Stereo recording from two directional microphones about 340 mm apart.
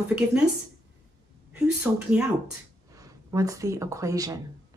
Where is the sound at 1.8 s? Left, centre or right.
Centre.